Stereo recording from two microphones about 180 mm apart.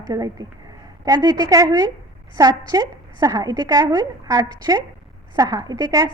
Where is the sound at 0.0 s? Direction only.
20° right (ahead or behind).